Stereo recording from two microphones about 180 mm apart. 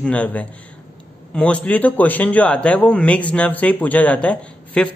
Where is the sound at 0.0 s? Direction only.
5° left (ahead or behind).